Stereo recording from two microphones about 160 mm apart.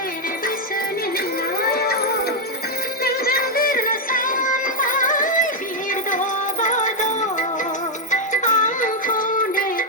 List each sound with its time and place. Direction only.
1.7 s music: 75° left (ahead or behind); by 9.8 s 60° left (ahead or behind)